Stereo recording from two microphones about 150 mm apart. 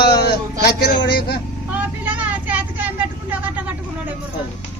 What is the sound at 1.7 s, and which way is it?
Vehicle, 10° right (ahead or behind).